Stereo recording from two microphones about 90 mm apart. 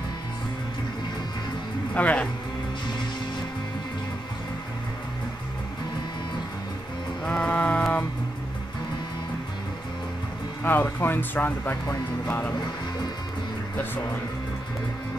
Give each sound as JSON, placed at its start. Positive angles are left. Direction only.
{"t": 2.0, "sound": "speech", "side_deg": 15}
{"t": 7.2, "sound": "music", "side_deg": 10}
{"t": 10.6, "sound": "speech", "side_deg": 25}